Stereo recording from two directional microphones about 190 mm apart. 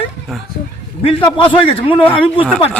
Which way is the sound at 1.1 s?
25° left (ahead or behind).